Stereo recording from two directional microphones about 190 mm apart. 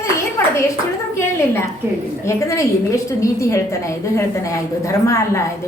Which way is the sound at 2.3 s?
15° left (ahead or behind).